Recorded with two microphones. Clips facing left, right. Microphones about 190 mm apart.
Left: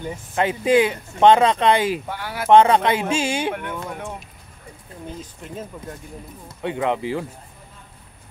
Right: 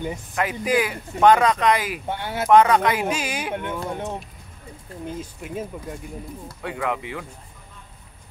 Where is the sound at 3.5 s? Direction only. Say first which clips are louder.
Right 2 dB; 25° right (ahead or behind).